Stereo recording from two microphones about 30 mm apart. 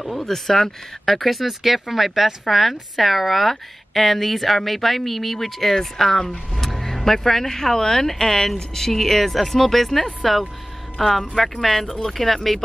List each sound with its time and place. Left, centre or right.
0.0 s speech: centre
1.0 s speech: centre